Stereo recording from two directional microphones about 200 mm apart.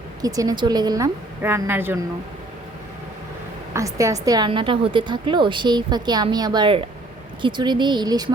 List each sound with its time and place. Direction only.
0.2 s a woman's voice: 20° right (ahead or behind)
3.8 s a woman's voice: 15° right (ahead or behind)